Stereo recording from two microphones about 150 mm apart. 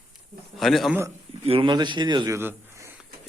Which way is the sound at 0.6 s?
Centre (ahead or behind).